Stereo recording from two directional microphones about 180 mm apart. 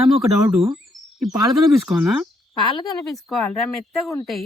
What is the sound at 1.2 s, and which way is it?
Speech, centre (ahead or behind).